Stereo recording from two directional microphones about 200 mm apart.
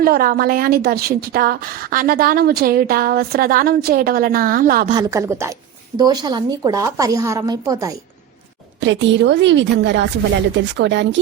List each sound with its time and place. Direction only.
0.0 s a woman's voice: 45° right (ahead or behind)
4.9 s a woman's voice: 15° right (ahead or behind)
8.8 s a woman's voice: 65° right (ahead or behind)